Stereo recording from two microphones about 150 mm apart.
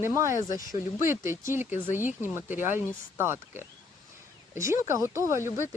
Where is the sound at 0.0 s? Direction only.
20° right (ahead or behind).